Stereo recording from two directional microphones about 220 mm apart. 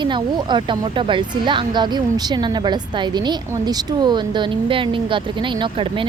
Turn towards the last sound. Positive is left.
turn(degrees=-25)  # may be behind; listen again after turning